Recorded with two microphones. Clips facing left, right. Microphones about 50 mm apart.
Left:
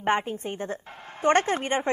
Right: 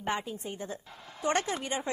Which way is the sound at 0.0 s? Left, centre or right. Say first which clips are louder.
Left 8 dB; left.